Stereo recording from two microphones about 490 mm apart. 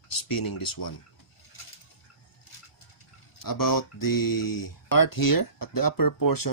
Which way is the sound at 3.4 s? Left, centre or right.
Left.